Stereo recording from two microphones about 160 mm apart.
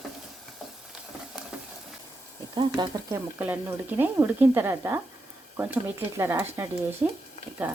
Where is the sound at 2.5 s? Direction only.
25° right (ahead or behind).